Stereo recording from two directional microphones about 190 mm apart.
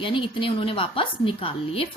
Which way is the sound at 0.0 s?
25° left (ahead or behind).